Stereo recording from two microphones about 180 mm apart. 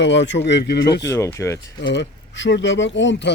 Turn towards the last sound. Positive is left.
turn(degrees=85)